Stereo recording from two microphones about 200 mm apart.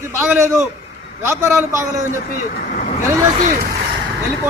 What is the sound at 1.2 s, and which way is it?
Speech, 15° right (ahead or behind).